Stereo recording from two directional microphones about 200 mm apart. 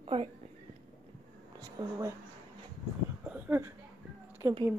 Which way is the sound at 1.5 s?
20° right (ahead or behind).